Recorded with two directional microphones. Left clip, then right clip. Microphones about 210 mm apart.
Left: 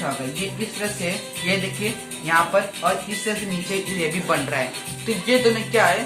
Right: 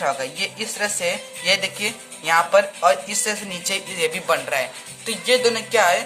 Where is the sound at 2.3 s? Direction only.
55° right (ahead or behind).